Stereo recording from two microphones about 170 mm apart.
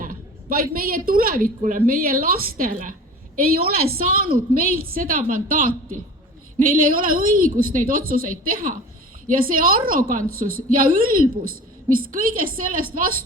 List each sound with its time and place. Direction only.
0.0 s a woman's voice: 55° right (ahead or behind)